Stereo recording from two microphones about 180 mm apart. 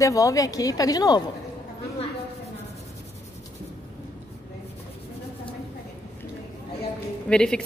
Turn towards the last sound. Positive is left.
turn(degrees=5)  # may be behind; listen again after turning